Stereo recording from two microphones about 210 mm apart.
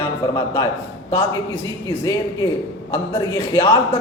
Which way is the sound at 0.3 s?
15° left (ahead or behind).